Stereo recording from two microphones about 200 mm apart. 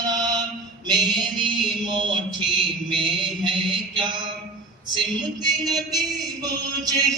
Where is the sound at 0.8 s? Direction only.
20° right (ahead or behind).